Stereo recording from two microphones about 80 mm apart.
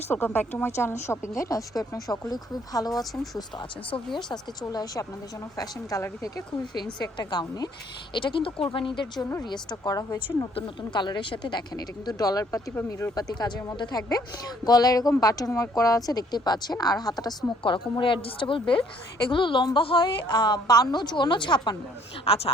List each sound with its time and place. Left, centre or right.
0.1 s a woman's voice: left
3.8 s a woman's voice: left
7.0 s speech: left
8.1 s speech: left
9.4 s speech: left
10.9 s a woman's voice: left
13.7 s a woman's voice: left
17.6 s a woman's voice: left